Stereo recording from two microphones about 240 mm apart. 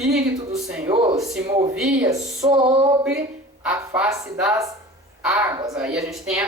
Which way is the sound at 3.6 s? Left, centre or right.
Centre.